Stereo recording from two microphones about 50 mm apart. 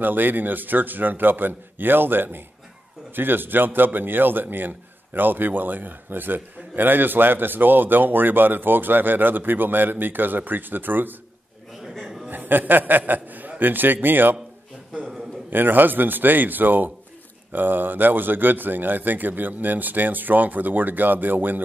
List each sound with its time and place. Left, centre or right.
0.0 s a man's voice: right
12.3 s a man's voice: right
15.5 s a man's voice: right